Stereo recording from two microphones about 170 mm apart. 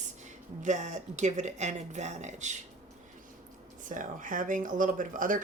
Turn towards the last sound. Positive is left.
turn(degrees=-50)  # may be behind; listen again after turning